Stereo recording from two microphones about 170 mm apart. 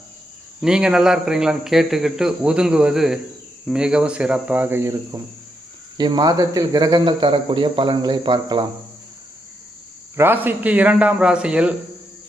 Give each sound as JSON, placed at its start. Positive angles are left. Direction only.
{"t": 0.6, "sound": "speech", "side_deg": -5}
{"t": 10.2, "sound": "speech", "side_deg": -10}